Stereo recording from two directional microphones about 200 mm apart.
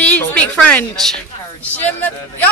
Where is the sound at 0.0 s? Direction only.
10° left (ahead or behind).